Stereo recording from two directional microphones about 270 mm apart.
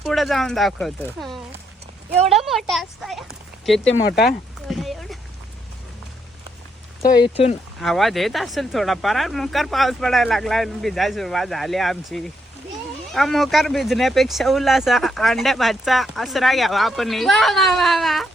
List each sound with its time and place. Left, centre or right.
0.0 s speech: centre
4.1 s speech: left
4.7 s a sound: centre
7.0 s speech: left
7.8 s speech: centre